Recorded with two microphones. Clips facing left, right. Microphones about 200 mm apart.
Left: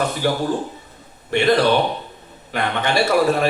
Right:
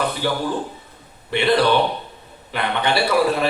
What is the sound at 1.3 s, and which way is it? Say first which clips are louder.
Speech: left 2 dB; 45° left (ahead or behind).